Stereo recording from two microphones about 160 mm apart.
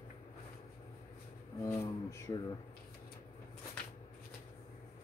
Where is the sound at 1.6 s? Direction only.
15° left (ahead or behind).